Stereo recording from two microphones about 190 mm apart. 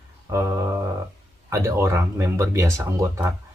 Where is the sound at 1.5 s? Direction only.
15° right (ahead or behind).